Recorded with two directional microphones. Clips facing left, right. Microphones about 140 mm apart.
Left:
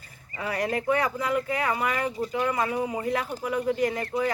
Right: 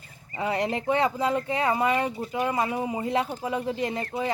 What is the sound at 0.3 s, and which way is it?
Speech, 25° right (ahead or behind).